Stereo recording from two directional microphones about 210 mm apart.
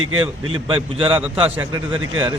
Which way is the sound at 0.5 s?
25° right (ahead or behind).